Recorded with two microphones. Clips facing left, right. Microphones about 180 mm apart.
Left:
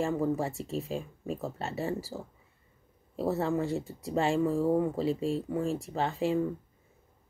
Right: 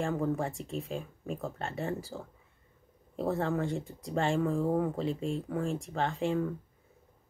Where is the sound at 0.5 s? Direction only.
5° left (ahead or behind).